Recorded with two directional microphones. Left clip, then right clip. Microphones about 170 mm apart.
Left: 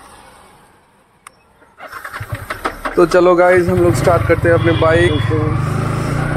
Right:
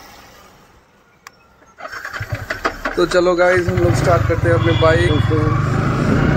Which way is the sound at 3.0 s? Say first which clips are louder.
Left 4 dB; 20° left (ahead or behind).